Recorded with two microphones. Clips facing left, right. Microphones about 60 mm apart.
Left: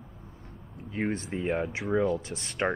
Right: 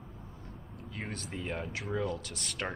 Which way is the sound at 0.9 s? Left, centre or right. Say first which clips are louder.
Left 10 dB; left.